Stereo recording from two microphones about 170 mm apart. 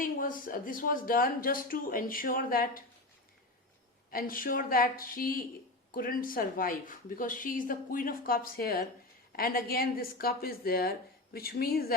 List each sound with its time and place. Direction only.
0.0 s speech: 55° left (ahead or behind)
4.1 s speech: 55° left (ahead or behind)